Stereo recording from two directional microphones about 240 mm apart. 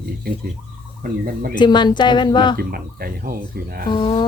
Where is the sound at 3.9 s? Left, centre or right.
Left.